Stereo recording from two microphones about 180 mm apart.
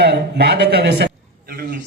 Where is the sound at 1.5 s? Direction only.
55° right (ahead or behind).